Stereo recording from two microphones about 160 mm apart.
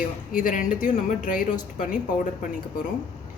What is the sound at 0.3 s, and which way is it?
Speech, 55° left (ahead or behind).